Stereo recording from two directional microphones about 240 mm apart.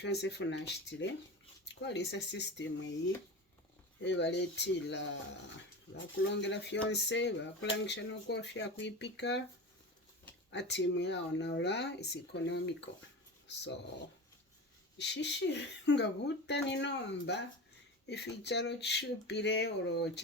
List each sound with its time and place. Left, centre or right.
0.0 s speech: left
4.0 s speech: left
10.5 s speech: left
14.9 s speech: left